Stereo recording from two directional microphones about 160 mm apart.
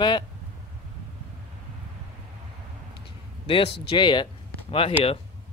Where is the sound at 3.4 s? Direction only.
35° left (ahead or behind).